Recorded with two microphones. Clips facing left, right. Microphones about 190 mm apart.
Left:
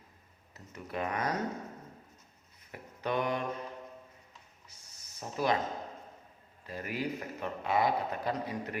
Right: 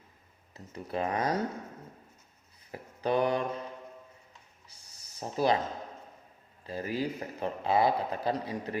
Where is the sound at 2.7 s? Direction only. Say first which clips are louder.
Right 5 dB; 35° right (ahead or behind).